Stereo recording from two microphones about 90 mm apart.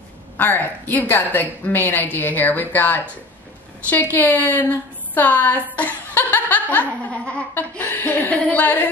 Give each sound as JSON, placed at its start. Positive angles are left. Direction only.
{"t": 0.4, "sound": "laughter", "side_deg": 20}